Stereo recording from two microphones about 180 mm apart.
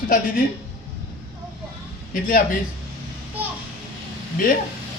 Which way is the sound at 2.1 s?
50° left (ahead or behind).